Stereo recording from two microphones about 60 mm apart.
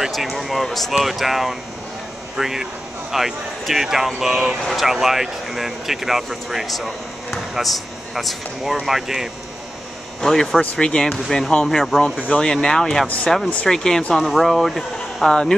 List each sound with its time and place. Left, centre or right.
0.0 s speech: centre
10.2 s speech: centre
10.6 s speech: centre
13.0 s speech: left
13.7 s speech: centre